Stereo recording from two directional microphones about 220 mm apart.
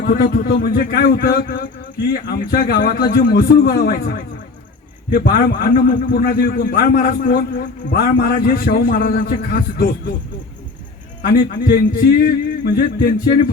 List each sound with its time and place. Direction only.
0.0 s a man's voice: 40° left (ahead or behind)
11.4 s a man's voice: 40° left (ahead or behind)